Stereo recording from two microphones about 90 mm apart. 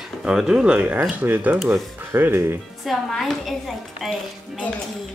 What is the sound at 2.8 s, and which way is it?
A woman's voice, centre (ahead or behind).